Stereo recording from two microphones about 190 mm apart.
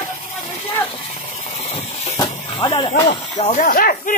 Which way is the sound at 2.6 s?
25° left (ahead or behind).